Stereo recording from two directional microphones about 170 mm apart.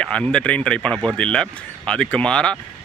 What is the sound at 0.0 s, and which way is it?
Speech, 5° left (ahead or behind).